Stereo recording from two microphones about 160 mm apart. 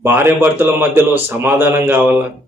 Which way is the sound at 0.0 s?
15° right (ahead or behind).